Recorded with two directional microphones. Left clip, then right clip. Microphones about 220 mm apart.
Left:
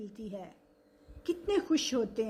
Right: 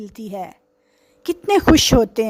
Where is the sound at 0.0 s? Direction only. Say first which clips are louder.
Right 14 dB; 50° right (ahead or behind).